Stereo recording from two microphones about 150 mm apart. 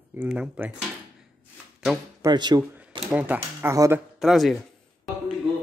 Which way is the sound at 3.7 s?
20° right (ahead or behind).